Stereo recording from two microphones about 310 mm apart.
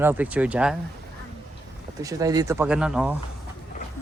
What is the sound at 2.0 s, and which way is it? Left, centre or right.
Speech, centre.